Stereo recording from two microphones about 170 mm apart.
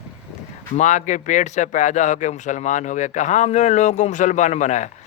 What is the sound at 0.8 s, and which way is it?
Speech, 45° left (ahead or behind).